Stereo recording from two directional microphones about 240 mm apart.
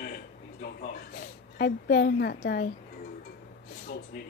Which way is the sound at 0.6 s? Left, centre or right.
Left.